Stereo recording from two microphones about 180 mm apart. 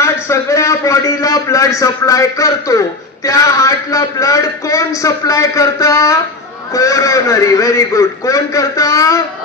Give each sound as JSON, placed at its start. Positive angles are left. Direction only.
{"t": 0.0, "sound": "a man's voice", "side_deg": 15}